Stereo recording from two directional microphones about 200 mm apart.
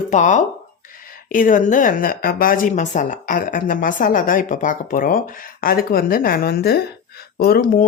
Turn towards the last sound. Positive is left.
turn(degrees=45)  # may be behind; listen again after turning